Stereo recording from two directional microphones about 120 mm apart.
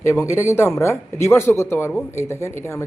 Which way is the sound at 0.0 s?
25° left (ahead or behind).